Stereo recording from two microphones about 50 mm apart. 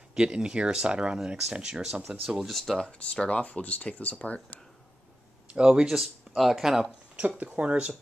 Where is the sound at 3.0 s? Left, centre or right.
Left.